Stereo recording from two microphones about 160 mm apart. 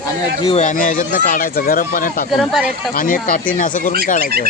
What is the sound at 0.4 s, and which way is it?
Speech, 45° left (ahead or behind).